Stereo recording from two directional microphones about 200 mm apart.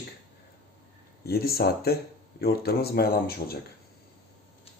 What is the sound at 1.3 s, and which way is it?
Speech, 50° left (ahead or behind).